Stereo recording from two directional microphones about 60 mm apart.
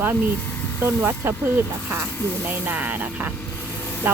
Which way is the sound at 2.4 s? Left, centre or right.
Right.